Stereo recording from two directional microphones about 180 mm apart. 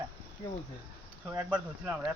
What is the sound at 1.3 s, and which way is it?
Speech, 10° right (ahead or behind).